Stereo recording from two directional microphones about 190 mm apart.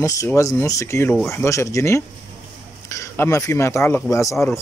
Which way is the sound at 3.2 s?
15° left (ahead or behind).